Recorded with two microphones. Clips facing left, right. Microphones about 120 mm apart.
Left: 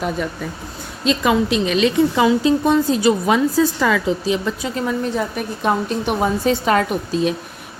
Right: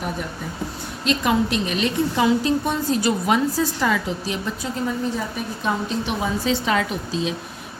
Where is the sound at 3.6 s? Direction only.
90° left; by 7.3 s 55° left (ahead or behind).